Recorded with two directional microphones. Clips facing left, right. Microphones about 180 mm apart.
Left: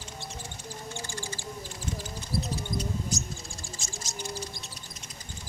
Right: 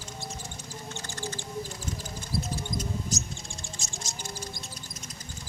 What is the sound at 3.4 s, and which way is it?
Bird, centre (ahead or behind).